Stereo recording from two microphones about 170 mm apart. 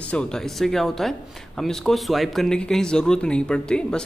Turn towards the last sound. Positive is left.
turn(degrees=5)  # may be behind; listen again after turning